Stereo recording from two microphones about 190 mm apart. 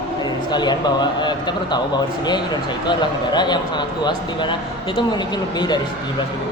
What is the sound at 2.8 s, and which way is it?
Speech, 25° left (ahead or behind).